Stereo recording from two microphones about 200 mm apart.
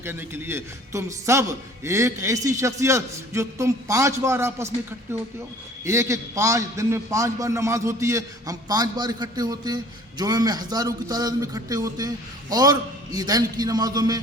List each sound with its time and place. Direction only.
0.0 s a man's voice: 10° right (ahead or behind)